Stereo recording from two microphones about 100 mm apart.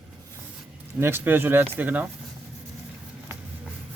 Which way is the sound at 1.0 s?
25° right (ahead or behind).